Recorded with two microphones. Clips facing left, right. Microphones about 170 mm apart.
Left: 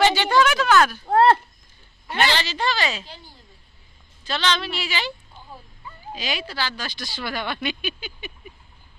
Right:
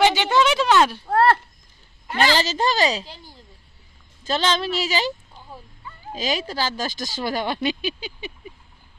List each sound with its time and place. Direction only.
0.0 s a sound: 20° right (ahead or behind)
1.0 s speech: 20° left (ahead or behind)
2.1 s speech: 40° right (ahead or behind)
4.3 s speech: 40° right (ahead or behind)
6.1 s speech: 40° right (ahead or behind)